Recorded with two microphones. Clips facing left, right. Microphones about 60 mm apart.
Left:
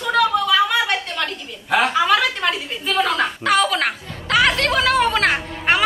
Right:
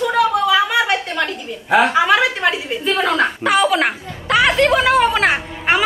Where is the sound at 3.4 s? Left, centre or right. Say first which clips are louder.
Right 2 dB; centre.